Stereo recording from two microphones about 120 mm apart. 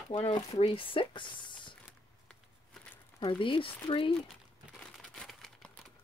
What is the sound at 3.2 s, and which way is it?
Speech, 40° left (ahead or behind).